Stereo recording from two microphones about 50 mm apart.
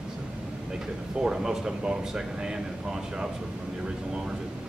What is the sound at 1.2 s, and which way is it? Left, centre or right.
Speech, centre.